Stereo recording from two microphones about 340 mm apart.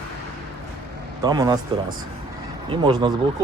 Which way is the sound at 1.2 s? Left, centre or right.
Centre.